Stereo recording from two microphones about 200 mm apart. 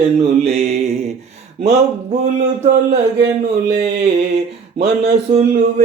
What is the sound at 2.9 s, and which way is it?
Speech, 55° right (ahead or behind).